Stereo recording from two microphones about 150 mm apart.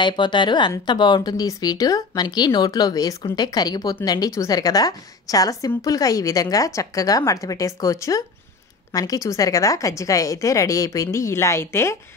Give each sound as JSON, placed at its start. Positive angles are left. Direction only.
{"t": 0.0, "sound": "speech", "side_deg": 30}